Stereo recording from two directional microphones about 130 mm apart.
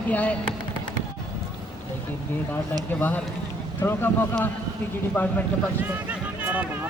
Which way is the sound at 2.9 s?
15° left (ahead or behind).